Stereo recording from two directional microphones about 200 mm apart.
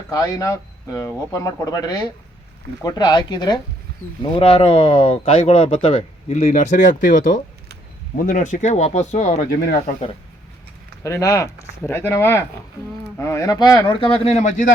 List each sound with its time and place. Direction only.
0.1 s speech: 15° left (ahead or behind); by 9.9 s 45° left (ahead or behind)
11.0 s speech: 15° left (ahead or behind); by 14.7 s 35° left (ahead or behind)